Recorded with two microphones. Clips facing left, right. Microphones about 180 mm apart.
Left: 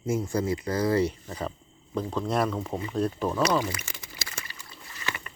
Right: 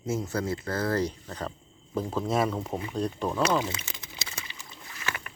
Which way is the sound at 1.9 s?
5° right (ahead or behind).